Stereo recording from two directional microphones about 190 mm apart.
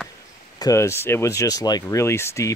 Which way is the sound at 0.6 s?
15° left (ahead or behind).